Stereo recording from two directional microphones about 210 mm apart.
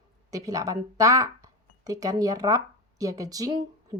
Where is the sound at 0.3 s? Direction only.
15° right (ahead or behind).